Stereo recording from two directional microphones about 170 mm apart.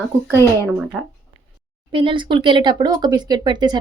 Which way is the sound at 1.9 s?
30° right (ahead or behind).